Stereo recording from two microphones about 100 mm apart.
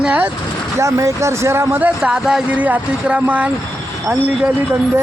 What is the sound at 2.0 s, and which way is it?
Speech, 10° right (ahead or behind).